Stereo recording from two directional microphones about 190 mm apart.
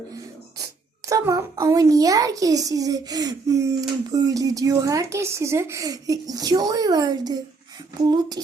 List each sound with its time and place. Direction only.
1.0 s a child's voice: 15° right (ahead or behind)